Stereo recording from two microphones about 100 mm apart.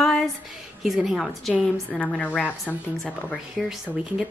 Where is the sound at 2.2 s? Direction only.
15° left (ahead or behind).